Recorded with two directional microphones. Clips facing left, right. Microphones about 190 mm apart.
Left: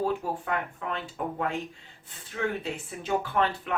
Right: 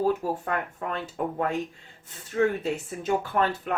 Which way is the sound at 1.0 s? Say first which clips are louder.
Right 4 dB; 45° right (ahead or behind).